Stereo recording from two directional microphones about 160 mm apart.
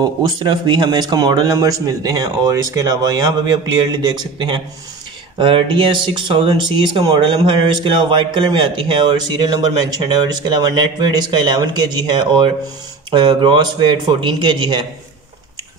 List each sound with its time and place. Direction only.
0.0 s speech: 25° right (ahead or behind)